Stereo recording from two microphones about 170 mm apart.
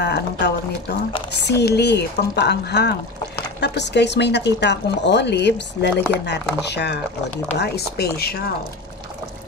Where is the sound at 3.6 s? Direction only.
90° left.